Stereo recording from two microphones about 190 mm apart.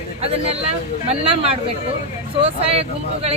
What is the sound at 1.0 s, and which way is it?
Speech, 30° right (ahead or behind).